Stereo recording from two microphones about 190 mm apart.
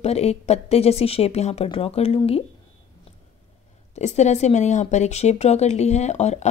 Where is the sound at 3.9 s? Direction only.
35° left (ahead or behind).